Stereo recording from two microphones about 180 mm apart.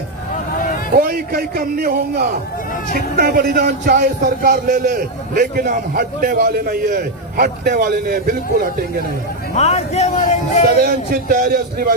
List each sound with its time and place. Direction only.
0.9 s a man's voice: 55° right (ahead or behind)
9.6 s speech: 35° left (ahead or behind)
10.8 s a man's voice: 55° right (ahead or behind)